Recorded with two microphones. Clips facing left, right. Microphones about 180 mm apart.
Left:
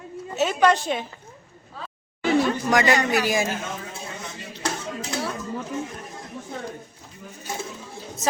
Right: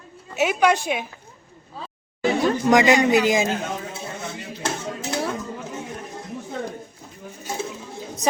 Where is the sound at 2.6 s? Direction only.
20° right (ahead or behind).